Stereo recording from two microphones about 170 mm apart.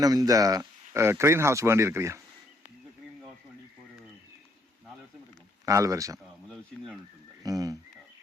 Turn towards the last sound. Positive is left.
turn(degrees=-20)  # may be behind; listen again after turning